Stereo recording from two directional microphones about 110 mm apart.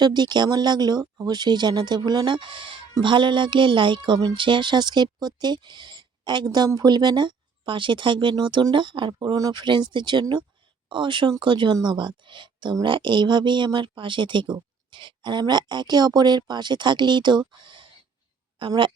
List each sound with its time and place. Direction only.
0.0 s speech: 40° right (ahead or behind)